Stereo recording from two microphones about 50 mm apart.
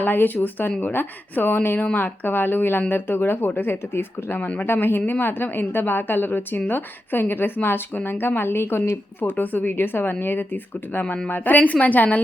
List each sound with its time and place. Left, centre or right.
0.0 s a woman's voice: left
9.4 s speech: left